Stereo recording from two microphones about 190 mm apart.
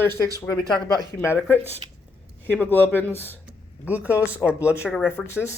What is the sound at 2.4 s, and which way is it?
Speech, 10° left (ahead or behind).